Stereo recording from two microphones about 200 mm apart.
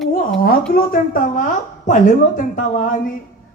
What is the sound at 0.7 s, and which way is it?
A woman's voice, 45° left (ahead or behind).